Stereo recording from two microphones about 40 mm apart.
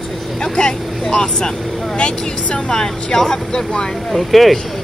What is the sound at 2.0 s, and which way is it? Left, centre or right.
Speech, left.